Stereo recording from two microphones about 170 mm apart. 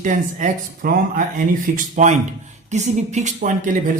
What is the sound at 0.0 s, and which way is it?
Speech, 50° right (ahead or behind).